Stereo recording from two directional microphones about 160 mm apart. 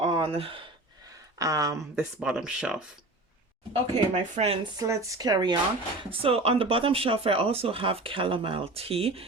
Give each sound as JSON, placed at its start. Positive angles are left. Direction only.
{"t": 0.2, "sound": "speech", "side_deg": -35}
{"t": 1.4, "sound": "speech", "side_deg": -20}
{"t": 2.0, "sound": "speech", "side_deg": -5}
{"t": 3.7, "sound": "speech", "side_deg": -40}
{"t": 4.8, "sound": "speech", "side_deg": -20}
{"t": 6.1, "sound": "speech", "side_deg": -35}